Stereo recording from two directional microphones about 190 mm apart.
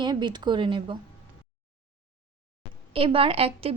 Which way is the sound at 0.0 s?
25° right (ahead or behind).